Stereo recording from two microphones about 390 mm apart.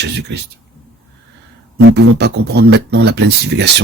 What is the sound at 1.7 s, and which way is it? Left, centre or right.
Speech, right.